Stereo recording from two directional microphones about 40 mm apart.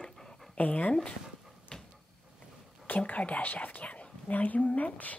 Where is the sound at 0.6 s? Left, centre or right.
Left.